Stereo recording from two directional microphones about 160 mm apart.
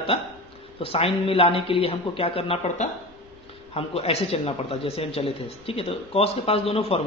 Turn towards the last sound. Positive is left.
turn(degrees=40)  # may be behind; listen again after turning